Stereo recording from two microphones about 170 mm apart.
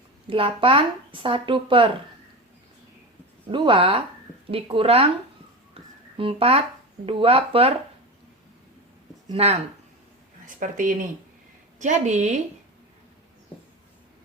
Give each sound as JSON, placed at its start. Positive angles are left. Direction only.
{"t": 0.3, "sound": "speech", "side_deg": -30}
{"t": 3.5, "sound": "speech", "side_deg": -30}
{"t": 6.1, "sound": "speech", "side_deg": -35}
{"t": 9.3, "sound": "speech", "side_deg": -35}
{"t": 10.4, "sound": "a woman's voice", "side_deg": -50}